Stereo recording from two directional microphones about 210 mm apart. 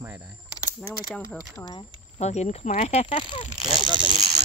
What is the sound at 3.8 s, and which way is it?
Speech, 20° right (ahead or behind).